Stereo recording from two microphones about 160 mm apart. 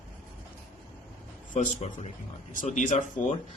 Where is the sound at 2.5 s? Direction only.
55° left (ahead or behind).